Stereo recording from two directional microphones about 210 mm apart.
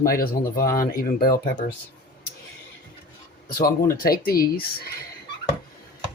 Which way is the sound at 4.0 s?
45° left (ahead or behind).